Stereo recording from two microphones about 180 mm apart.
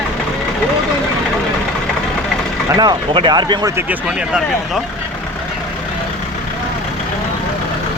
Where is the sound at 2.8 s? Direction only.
25° right (ahead or behind).